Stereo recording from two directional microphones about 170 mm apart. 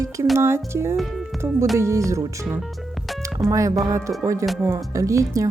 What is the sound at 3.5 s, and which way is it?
Speech, 20° right (ahead or behind).